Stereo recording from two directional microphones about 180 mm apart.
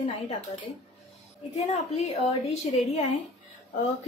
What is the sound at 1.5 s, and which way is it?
Speech, 40° left (ahead or behind).